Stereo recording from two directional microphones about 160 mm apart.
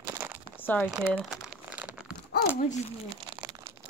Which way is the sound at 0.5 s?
10° left (ahead or behind).